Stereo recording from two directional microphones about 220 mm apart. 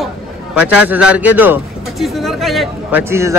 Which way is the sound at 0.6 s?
5° right (ahead or behind).